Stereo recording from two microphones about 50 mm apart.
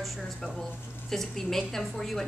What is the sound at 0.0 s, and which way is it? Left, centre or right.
A woman's voice, centre.